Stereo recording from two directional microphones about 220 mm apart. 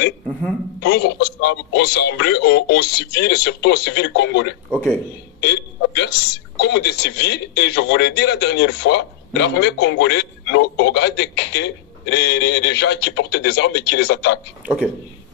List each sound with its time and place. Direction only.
0.7 s speech: 45° left (ahead or behind)
4.6 s speech: 5° left (ahead or behind)
5.4 s a sound: 50° left (ahead or behind)
6.6 s speech: 50° left (ahead or behind)